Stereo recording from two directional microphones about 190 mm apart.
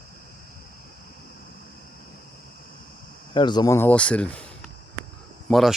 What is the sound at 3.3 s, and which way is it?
Speech, 25° left (ahead or behind).